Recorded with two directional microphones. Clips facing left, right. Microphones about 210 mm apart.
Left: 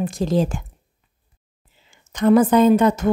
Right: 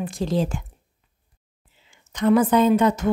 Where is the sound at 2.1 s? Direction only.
45° left (ahead or behind).